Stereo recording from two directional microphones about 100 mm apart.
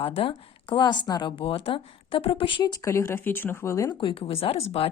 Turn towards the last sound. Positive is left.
turn(degrees=75)  # may be behind; listen again after turning